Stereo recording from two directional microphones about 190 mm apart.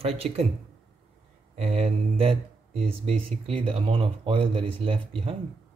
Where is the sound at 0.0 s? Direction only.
30° right (ahead or behind).